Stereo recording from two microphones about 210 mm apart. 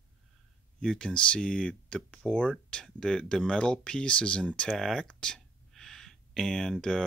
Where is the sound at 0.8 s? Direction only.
5° left (ahead or behind).